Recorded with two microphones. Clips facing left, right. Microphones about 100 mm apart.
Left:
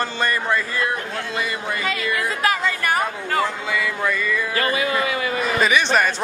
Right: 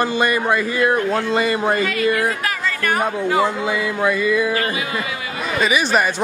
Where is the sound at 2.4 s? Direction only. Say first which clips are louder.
Left 2 dB; 25° left (ahead or behind).